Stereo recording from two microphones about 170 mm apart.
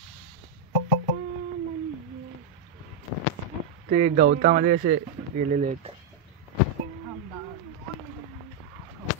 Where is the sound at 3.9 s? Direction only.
45° right (ahead or behind).